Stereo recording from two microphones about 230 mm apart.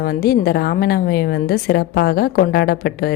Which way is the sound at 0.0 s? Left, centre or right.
Left.